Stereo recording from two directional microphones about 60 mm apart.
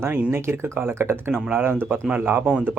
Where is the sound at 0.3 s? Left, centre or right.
Right.